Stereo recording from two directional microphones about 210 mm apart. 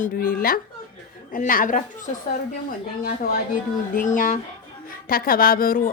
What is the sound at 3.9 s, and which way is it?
Speech, 40° left (ahead or behind).